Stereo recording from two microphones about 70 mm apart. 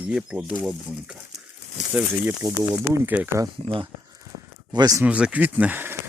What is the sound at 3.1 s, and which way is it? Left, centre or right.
Speech, centre.